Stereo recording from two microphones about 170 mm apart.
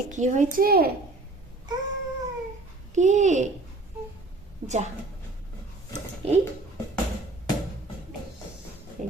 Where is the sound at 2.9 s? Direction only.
45° right (ahead or behind).